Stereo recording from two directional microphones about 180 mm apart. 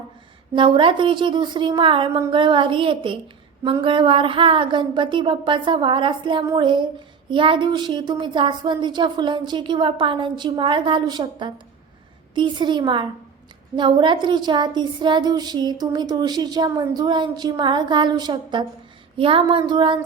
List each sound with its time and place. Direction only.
0.5 s speech: 30° right (ahead or behind)